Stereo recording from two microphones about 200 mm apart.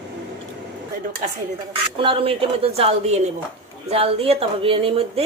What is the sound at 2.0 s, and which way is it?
A woman's voice, 25° right (ahead or behind).